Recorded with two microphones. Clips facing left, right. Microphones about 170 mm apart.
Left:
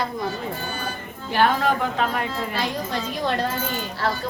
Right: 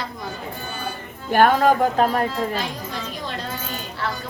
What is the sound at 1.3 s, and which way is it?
Speech, 45° right (ahead or behind).